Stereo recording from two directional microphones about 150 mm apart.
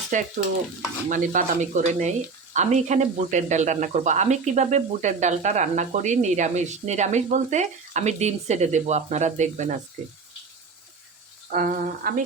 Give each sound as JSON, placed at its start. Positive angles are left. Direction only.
{"t": 0.1, "sound": "stir", "side_deg": -60}
{"t": 1.1, "sound": "speech", "side_deg": -65}
{"t": 11.5, "sound": "speech", "side_deg": -70}